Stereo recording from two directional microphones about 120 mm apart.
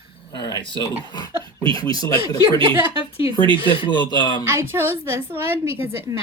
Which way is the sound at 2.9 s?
50° left (ahead or behind).